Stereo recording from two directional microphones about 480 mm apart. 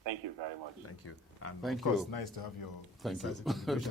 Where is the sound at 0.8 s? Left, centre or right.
Left.